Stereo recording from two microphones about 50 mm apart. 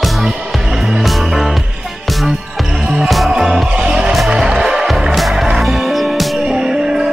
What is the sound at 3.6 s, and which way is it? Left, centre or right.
Music, centre.